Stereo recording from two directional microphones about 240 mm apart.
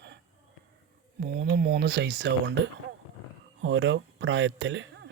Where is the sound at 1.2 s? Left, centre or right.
Right.